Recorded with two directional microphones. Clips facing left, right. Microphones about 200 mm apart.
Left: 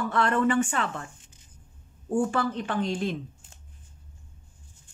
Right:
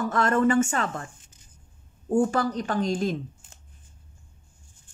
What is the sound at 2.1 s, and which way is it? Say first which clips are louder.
Speech: right 3 dB; 40° right (ahead or behind).